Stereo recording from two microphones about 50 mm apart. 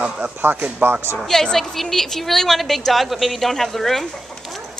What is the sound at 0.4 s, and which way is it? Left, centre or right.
Speech, right.